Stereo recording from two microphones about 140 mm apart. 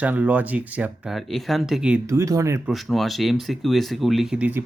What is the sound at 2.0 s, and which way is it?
Speech, 20° right (ahead or behind).